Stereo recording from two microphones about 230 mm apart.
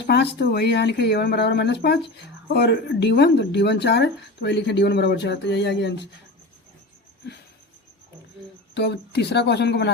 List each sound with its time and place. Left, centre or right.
0.0 s speech: left
8.7 s speech: left